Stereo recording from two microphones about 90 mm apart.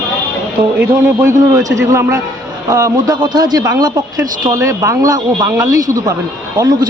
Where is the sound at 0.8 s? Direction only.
25° right (ahead or behind).